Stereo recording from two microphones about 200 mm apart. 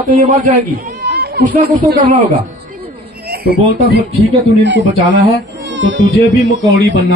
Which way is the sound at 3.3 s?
50° right (ahead or behind).